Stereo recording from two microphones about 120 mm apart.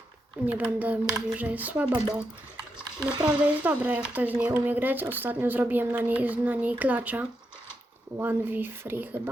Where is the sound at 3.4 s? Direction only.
15° right (ahead or behind).